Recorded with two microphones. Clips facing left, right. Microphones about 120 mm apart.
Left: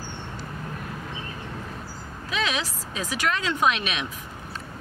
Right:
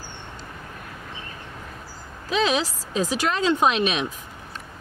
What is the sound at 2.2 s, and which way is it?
Speech, 35° right (ahead or behind).